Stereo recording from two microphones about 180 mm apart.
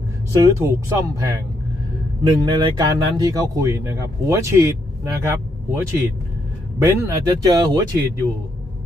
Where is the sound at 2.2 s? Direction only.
25° right (ahead or behind).